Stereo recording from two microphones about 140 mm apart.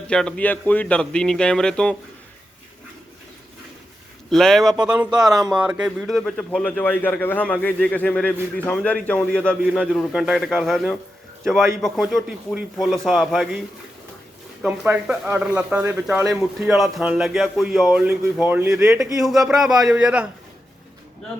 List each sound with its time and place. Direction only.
0.1 s a man's voice: 5° left (ahead or behind)
4.3 s speech: 5° left (ahead or behind)
5.2 s speech: 25° right (ahead or behind)
5.5 s a man's voice: 10° right (ahead or behind)
14.6 s speech: 5° right (ahead or behind)